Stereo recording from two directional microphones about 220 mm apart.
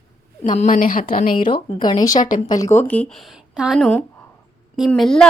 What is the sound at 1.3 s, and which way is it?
A woman's voice, 20° left (ahead or behind).